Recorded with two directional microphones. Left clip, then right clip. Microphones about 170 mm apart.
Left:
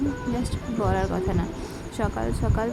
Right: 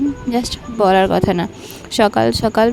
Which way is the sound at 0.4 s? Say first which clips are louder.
Right 16 dB; 60° right (ahead or behind).